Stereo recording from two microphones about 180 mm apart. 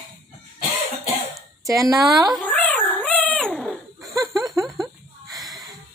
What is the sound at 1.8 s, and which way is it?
Speech, centre (ahead or behind).